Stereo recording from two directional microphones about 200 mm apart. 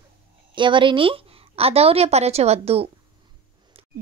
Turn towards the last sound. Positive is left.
turn(degrees=-30)  # may be behind; listen again after turning